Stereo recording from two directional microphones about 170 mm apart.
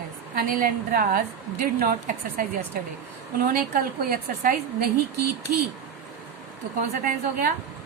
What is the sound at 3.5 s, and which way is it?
A woman's voice, 55° right (ahead or behind).